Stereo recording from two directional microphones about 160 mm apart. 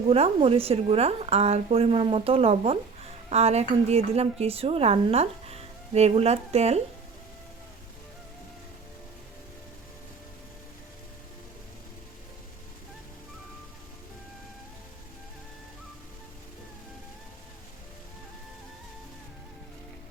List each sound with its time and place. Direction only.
0.1 s speech: 35° right (ahead or behind)